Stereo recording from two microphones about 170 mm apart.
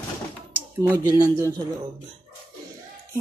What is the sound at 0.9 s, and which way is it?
Speech, 20° right (ahead or behind).